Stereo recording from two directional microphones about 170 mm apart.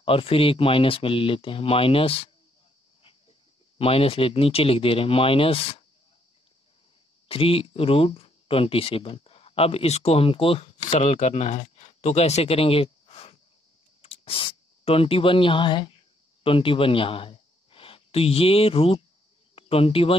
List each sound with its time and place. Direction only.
0.0 s speech: 35° left (ahead or behind)
3.7 s speech: 35° left (ahead or behind)
7.2 s speech: 35° left (ahead or behind)